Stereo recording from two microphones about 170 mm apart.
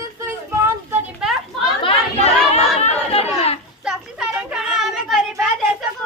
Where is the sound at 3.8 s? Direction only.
5° right (ahead or behind).